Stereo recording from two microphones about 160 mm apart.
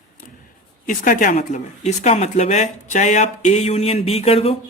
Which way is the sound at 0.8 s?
55° left (ahead or behind).